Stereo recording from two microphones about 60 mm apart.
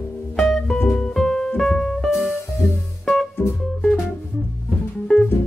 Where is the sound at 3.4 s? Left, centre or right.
Left.